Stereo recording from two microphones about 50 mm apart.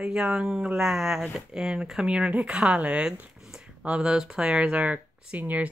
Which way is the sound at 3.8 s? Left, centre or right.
Centre.